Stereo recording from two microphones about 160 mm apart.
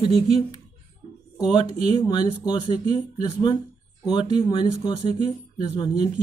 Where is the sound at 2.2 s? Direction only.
40° left (ahead or behind).